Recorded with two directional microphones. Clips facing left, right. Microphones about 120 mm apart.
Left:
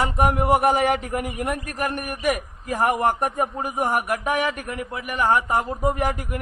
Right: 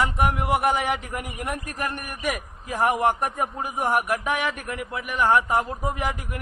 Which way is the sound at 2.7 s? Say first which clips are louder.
Left 1 dB; 45° left (ahead or behind).